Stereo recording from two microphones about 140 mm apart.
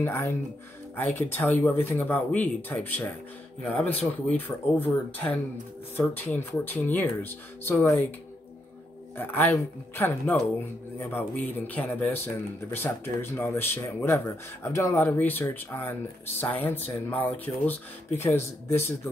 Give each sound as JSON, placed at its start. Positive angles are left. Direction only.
{"t": 0.0, "sound": "speech", "side_deg": 15}
{"t": 9.1, "sound": "speech", "side_deg": 15}